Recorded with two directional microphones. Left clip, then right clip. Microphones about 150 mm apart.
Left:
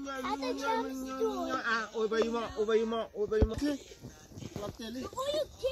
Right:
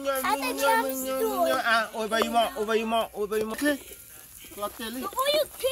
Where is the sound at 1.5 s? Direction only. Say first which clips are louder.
Right 8 dB; 90° right.